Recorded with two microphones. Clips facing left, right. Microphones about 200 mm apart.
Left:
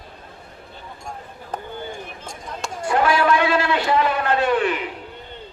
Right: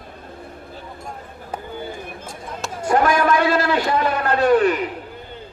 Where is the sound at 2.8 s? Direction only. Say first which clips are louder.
Right 1 dB; 45° right (ahead or behind).